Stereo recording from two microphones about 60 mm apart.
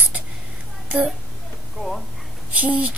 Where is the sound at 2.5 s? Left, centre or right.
Right.